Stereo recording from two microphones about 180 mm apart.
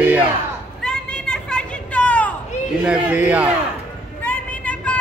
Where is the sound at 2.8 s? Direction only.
10° right (ahead or behind).